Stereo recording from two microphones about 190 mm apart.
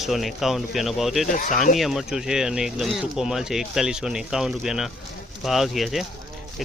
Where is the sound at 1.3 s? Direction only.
45° left (ahead or behind).